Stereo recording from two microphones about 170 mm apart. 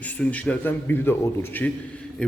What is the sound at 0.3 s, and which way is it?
A man's voice, 10° left (ahead or behind).